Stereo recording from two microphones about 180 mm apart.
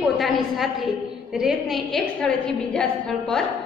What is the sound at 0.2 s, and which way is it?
A woman's voice, centre (ahead or behind).